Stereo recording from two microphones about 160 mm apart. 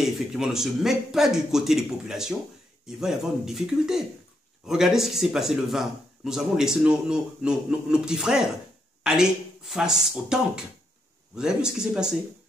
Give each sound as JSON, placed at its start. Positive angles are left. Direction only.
{"t": 0.0, "sound": "speech", "side_deg": -5}